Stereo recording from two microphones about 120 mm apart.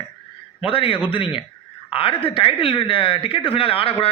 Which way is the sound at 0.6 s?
50° left (ahead or behind).